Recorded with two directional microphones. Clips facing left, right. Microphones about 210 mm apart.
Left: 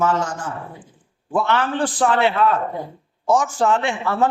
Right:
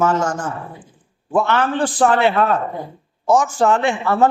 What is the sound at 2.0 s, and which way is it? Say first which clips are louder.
A man's voice: right 2 dB; 45° right (ahead or behind).